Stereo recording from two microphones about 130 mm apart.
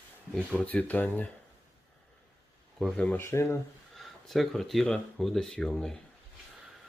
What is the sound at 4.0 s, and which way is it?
Speech, centre (ahead or behind).